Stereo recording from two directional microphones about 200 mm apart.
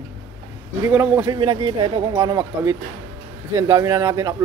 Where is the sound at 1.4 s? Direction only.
25° right (ahead or behind).